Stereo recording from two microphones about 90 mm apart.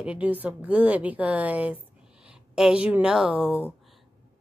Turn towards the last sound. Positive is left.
turn(degrees=-15)  # may be behind; listen again after turning